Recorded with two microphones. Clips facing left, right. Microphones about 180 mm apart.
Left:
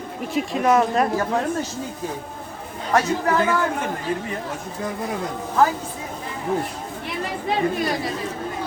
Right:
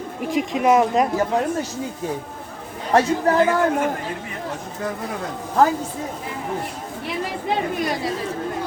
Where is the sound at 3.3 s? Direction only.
35° right (ahead or behind).